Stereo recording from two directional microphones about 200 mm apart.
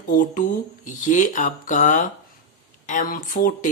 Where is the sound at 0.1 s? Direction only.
45° left (ahead or behind).